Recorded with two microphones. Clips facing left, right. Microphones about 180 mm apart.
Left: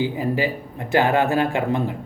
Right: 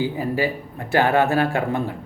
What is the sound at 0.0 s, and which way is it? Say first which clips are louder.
Speech: even; 20° left (ahead or behind).